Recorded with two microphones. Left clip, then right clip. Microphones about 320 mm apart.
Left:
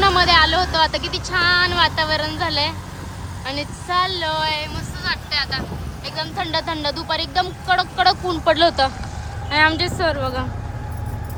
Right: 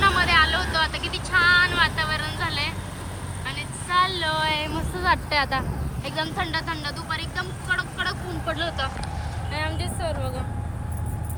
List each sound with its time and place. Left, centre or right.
0.0 s speech: centre
5.0 s speech: centre
6.1 s speech: centre
9.5 s a woman's voice: left